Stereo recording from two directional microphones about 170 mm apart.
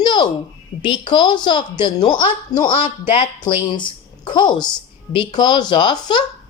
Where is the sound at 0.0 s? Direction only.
25° left (ahead or behind).